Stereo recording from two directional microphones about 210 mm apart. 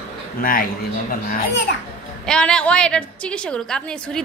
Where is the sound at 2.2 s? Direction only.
5° left (ahead or behind).